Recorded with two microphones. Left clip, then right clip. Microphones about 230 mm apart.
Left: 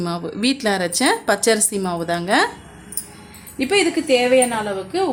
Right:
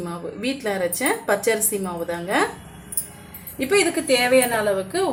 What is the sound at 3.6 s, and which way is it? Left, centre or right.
Speech, left.